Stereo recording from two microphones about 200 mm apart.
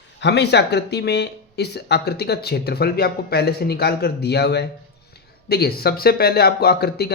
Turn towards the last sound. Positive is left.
turn(degrees=50)  # may be behind; listen again after turning